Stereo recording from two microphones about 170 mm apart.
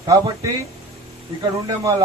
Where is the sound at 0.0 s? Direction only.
20° right (ahead or behind).